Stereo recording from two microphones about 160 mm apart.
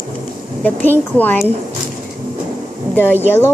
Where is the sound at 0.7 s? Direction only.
10° left (ahead or behind).